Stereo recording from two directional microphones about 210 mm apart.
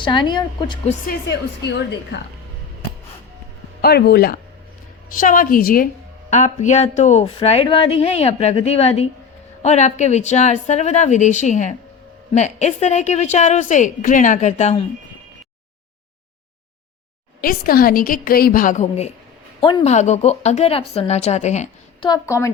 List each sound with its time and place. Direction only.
0.0 s a woman's voice: 20° left (ahead or behind)
1.0 s a woman's voice: 55° left (ahead or behind)
3.8 s a woman's voice: 50° left (ahead or behind); by 14.8 s 35° left (ahead or behind)
17.4 s a woman's voice: 45° left (ahead or behind)
19.5 s speech: 20° left (ahead or behind)
19.8 s a woman's voice: 35° left (ahead or behind)
22.1 s a woman's voice: 15° left (ahead or behind)